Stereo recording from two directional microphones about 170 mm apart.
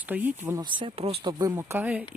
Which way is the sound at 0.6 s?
30° right (ahead or behind).